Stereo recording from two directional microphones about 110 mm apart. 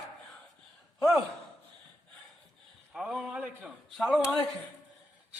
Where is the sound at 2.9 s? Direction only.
5° right (ahead or behind).